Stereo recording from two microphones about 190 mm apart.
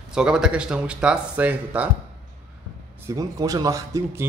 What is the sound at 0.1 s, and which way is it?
Speech, 5° right (ahead or behind).